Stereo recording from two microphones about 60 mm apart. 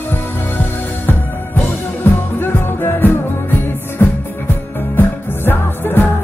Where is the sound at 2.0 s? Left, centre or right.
Left.